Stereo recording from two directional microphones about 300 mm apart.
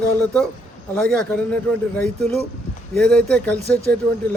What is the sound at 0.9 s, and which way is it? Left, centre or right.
A man's voice, centre.